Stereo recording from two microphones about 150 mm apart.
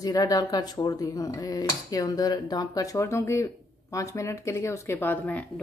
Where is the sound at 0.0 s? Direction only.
25° left (ahead or behind).